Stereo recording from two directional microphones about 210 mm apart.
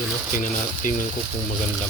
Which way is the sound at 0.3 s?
40° left (ahead or behind).